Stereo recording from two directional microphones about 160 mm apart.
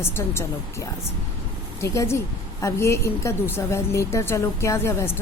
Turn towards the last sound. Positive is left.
turn(degrees=15)  # may be behind; listen again after turning